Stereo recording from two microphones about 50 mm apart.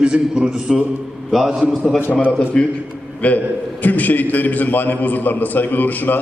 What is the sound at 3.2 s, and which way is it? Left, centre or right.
A man's voice, left.